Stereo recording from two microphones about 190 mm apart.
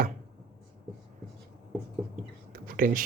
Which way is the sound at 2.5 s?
50° right (ahead or behind).